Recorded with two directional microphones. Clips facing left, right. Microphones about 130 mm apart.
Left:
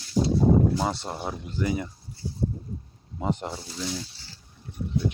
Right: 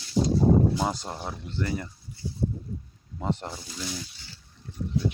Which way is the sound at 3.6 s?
25° left (ahead or behind).